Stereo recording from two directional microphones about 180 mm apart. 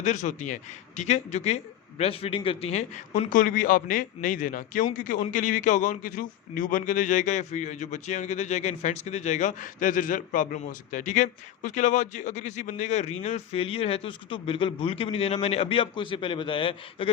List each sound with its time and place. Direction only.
0.0 s speech: 40° left (ahead or behind)